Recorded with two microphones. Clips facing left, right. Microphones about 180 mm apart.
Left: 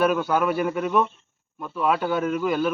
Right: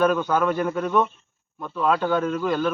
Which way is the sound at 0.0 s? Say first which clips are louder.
Right 1 dB; 10° left (ahead or behind).